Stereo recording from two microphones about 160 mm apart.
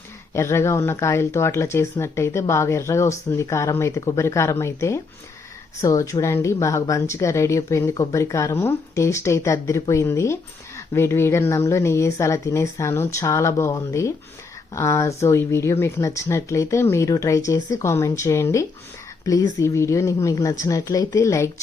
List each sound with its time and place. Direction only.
0.3 s a woman's voice: 15° left (ahead or behind)